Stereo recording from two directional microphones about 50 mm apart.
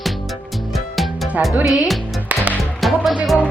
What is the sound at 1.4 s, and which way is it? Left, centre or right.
Speech, right.